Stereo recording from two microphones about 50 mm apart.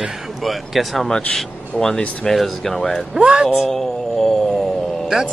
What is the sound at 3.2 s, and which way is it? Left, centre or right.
Speech, right.